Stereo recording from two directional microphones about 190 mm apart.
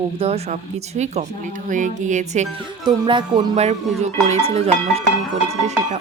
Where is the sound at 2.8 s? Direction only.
25° right (ahead or behind).